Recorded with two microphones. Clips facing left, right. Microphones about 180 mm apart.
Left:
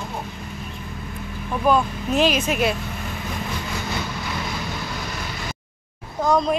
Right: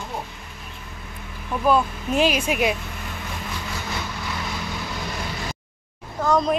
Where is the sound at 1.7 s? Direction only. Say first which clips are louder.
Even; 10° right (ahead or behind).